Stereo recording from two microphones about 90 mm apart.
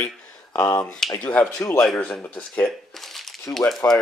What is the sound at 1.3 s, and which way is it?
Speech, 15° left (ahead or behind).